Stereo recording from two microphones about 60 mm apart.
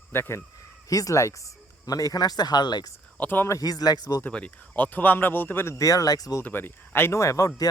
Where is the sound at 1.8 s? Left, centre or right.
Left.